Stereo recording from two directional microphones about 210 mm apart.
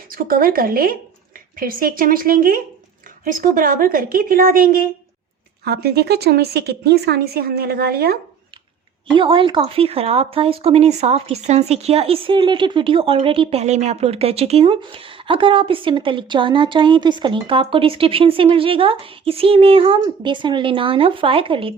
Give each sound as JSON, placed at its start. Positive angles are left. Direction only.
{"t": 0.1, "sound": "a woman's voice", "side_deg": -45}
{"t": 9.1, "sound": "speech", "side_deg": -25}